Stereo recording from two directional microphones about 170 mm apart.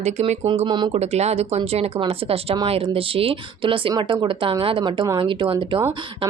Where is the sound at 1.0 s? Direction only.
40° right (ahead or behind).